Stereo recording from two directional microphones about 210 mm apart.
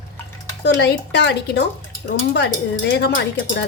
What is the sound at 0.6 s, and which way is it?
Speech, 55° left (ahead or behind).